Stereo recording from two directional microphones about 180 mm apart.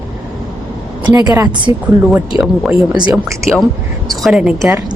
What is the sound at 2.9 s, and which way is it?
Speech, 25° right (ahead or behind).